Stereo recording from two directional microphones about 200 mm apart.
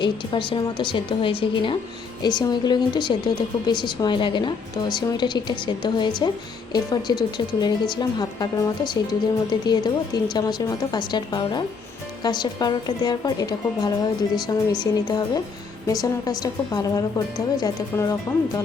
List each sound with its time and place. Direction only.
0.0 s a woman's voice: 25° left (ahead or behind)